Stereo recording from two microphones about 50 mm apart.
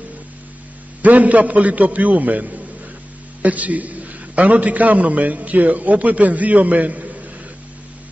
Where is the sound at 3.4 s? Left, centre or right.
Right.